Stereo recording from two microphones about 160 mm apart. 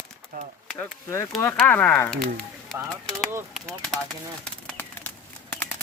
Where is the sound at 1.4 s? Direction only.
15° left (ahead or behind).